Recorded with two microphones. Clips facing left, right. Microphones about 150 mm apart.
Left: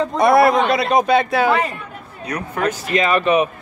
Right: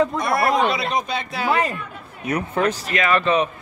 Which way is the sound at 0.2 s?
90° left.